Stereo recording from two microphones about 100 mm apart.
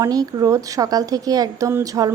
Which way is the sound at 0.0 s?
40° right (ahead or behind).